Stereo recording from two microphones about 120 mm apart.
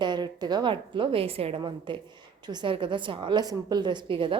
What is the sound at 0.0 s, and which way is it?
A woman's voice, 35° right (ahead or behind).